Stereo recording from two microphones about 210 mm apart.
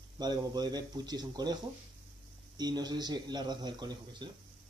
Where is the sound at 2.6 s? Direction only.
20° right (ahead or behind).